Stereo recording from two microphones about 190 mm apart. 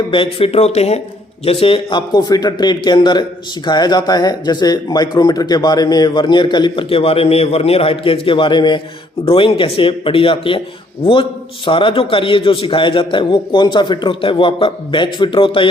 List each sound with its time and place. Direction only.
0.1 s speech: 30° left (ahead or behind)